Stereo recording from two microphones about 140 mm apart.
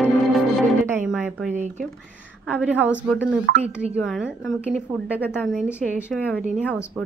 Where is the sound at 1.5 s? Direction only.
60° right (ahead or behind).